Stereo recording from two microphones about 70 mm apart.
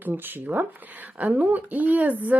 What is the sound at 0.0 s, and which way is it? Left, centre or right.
Speech, right.